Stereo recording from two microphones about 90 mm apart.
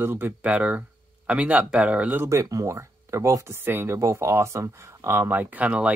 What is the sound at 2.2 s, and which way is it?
Speech, 35° right (ahead or behind).